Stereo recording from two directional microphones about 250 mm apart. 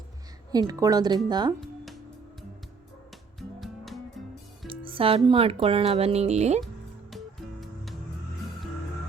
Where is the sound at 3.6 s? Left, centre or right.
Centre.